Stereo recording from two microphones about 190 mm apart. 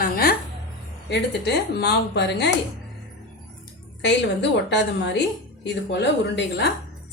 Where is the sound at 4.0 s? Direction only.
65° left (ahead or behind).